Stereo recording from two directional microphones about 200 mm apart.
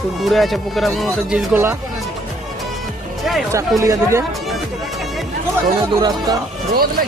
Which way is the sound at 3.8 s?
15° right (ahead or behind).